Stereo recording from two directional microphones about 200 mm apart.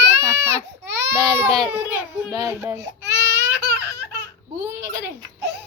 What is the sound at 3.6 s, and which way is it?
Laughter, 55° right (ahead or behind).